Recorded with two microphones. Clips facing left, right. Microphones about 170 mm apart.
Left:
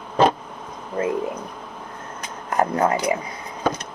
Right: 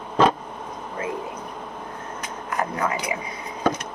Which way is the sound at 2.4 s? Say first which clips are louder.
Left 6 dB; 40° left (ahead or behind).